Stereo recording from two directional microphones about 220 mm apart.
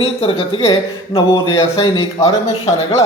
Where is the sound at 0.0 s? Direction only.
25° left (ahead or behind).